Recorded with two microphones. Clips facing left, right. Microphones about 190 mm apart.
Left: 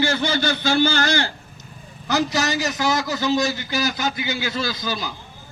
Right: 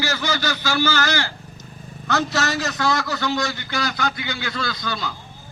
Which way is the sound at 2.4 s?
15° left (ahead or behind).